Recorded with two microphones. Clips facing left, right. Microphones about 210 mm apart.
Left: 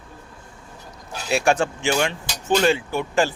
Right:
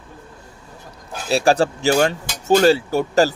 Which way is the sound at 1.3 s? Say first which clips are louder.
Right 4 dB; 35° right (ahead or behind).